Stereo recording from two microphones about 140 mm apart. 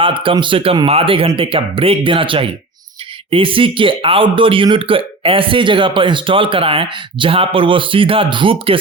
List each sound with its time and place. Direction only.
0.0 s speech: 40° right (ahead or behind)